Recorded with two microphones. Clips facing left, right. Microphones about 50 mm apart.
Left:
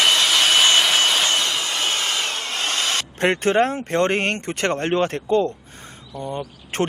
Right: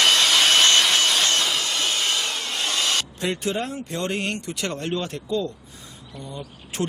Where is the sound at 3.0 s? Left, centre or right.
Left.